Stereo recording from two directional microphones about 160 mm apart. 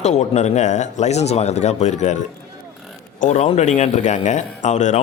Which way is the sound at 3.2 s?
45° left (ahead or behind).